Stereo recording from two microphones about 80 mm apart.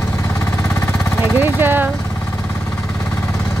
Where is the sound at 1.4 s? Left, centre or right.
Right.